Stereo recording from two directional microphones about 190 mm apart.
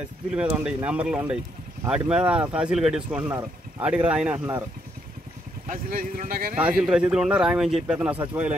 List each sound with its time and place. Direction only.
0.3 s speech: 5° right (ahead or behind)
5.7 s speech: 45° right (ahead or behind)
6.8 s speech: 5° right (ahead or behind)